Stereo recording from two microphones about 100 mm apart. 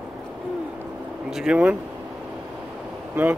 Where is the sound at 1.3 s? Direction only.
10° right (ahead or behind).